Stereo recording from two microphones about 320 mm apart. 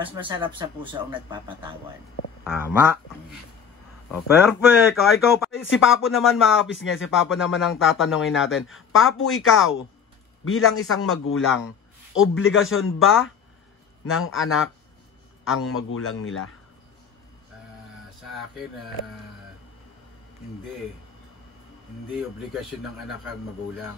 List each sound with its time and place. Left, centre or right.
0.0 s speech: centre
2.4 s speech: centre
5.5 s speech: left
6.0 s speech: centre
6.7 s a man's voice: left
7.9 s speech: centre
8.4 s a man's voice: left
18.3 s speech: centre
22.1 s speech: centre